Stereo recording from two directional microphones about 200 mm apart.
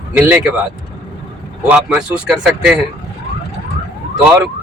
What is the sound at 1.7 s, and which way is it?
Speech, 5° right (ahead or behind).